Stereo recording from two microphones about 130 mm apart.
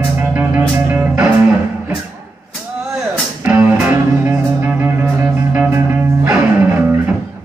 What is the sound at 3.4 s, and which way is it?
Music, 10° right (ahead or behind).